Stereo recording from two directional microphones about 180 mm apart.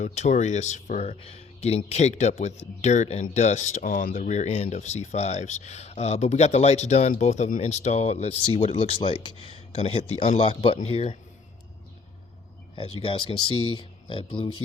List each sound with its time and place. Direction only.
0.0 s speech: 40° left (ahead or behind)
12.7 s speech: 30° left (ahead or behind)